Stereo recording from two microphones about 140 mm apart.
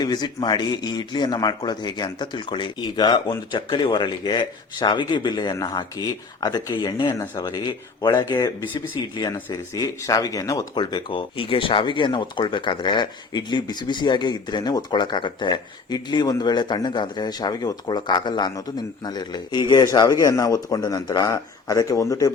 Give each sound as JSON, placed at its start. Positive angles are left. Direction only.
{"t": 0.0, "sound": "speech", "side_deg": 30}